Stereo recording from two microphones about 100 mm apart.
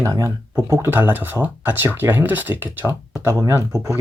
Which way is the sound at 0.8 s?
20° right (ahead or behind).